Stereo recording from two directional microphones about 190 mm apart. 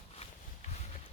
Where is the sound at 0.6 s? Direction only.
40° left (ahead or behind).